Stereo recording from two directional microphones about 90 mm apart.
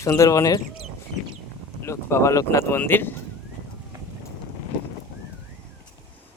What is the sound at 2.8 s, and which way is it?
Speech, 25° left (ahead or behind).